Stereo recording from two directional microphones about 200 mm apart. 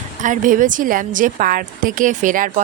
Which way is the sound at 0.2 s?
40° right (ahead or behind).